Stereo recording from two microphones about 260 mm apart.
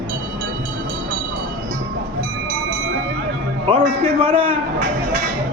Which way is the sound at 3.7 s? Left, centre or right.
Right.